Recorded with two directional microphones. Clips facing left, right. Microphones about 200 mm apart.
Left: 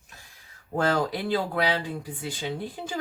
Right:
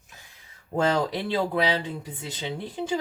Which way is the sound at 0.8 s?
25° right (ahead or behind).